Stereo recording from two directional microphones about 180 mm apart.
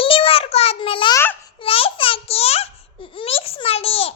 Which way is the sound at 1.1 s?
10° left (ahead or behind).